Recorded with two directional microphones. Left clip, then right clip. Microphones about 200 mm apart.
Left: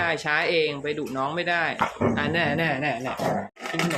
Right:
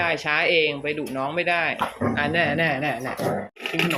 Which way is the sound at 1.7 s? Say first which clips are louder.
Left 1 dB; 25° left (ahead or behind).